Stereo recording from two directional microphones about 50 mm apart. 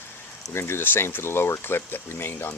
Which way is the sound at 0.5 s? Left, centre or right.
Left.